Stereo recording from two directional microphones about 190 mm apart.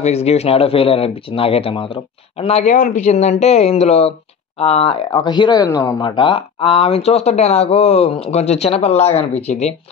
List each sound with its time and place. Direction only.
0.0 s speech: 35° left (ahead or behind)